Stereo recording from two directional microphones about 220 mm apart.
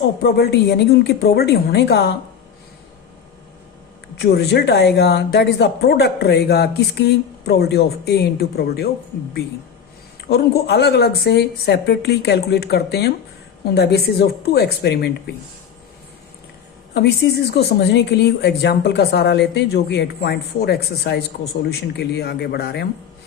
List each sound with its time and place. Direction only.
0.2 s speech: 50° left (ahead or behind)
4.2 s speech: 50° left (ahead or behind)
10.2 s speech: 45° left (ahead or behind)
16.9 s speech: 50° left (ahead or behind)